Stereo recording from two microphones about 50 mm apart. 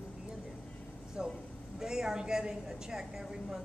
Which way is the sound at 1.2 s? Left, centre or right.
Centre.